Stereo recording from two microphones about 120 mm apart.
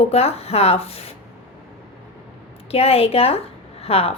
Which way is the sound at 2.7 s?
55° left (ahead or behind).